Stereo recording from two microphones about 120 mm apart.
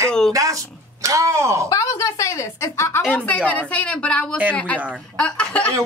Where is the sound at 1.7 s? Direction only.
30° left (ahead or behind).